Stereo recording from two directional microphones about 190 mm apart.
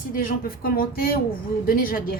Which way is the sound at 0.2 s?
50° left (ahead or behind).